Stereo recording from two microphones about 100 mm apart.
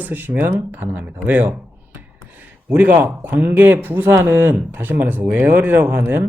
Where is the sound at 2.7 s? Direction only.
15° right (ahead or behind).